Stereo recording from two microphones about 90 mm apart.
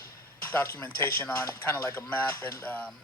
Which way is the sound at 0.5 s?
25° left (ahead or behind).